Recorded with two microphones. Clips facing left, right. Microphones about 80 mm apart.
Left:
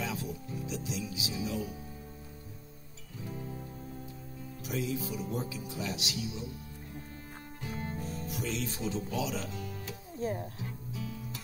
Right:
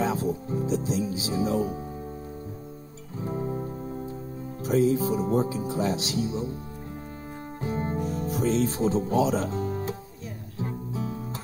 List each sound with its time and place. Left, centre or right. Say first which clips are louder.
0.0 s speech: right 11 dB; right
3.2 s music: right 11 dB; right
4.6 s speech: right 13 dB; right
7.6 s speech: right 10 dB; right
10.6 s music: right 9 dB; right